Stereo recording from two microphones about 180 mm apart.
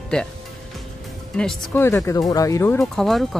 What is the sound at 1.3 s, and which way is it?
Speech, 5° left (ahead or behind).